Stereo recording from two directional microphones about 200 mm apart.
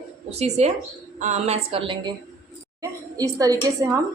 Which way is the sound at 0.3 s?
35° right (ahead or behind).